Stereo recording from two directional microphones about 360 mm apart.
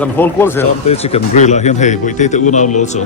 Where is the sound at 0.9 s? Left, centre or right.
Centre.